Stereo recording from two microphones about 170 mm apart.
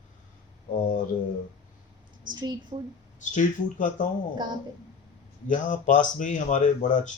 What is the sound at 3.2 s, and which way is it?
Speech, 50° left (ahead or behind).